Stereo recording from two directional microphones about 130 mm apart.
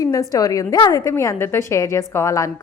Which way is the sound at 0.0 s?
25° left (ahead or behind).